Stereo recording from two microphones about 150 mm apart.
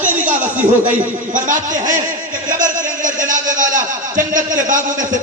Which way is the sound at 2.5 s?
60° right (ahead or behind).